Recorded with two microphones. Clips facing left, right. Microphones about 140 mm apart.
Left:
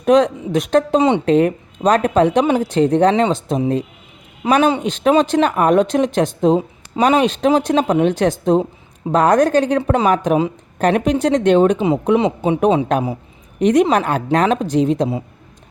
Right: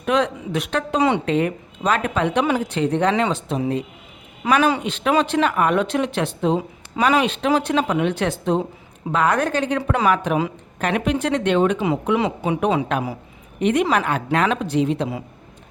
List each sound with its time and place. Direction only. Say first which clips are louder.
0.0 s speech: left 7 dB; 40° left (ahead or behind)
6.6 s speech: left 4 dB; 25° left (ahead or behind)
7.2 s speech: left 5 dB; 35° left (ahead or behind)
12.0 s speech: left 6 dB; 25° left (ahead or behind)
13.6 s speech: left 5 dB; 40° left (ahead or behind)